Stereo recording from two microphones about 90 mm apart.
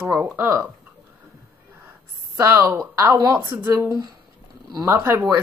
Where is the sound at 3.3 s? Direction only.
20° right (ahead or behind).